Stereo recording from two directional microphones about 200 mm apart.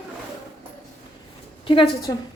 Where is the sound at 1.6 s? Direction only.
25° left (ahead or behind).